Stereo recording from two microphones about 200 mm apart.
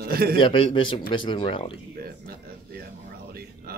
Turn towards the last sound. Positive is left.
turn(degrees=-50)  # may be behind; listen again after turning